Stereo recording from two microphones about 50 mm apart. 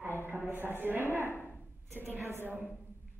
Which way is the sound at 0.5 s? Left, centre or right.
Right.